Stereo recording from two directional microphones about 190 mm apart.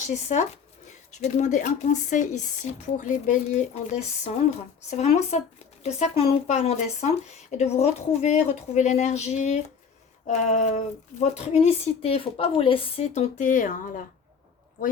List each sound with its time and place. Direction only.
0.1 s speech: 35° left (ahead or behind)